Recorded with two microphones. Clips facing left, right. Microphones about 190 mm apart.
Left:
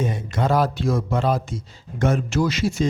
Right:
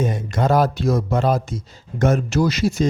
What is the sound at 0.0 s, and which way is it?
Speech, 45° right (ahead or behind).